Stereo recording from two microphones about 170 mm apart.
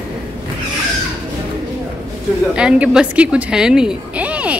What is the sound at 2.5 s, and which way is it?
A woman's voice, 5° right (ahead or behind).